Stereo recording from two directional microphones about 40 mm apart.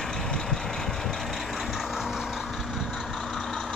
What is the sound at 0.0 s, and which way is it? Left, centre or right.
Vehicle, centre.